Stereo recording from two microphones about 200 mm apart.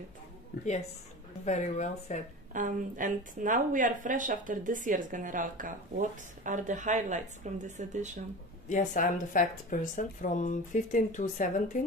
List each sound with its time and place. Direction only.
1.4 s speech: 35° left (ahead or behind)
2.5 s a woman's voice: 40° right (ahead or behind)
8.6 s speech: 40° left (ahead or behind)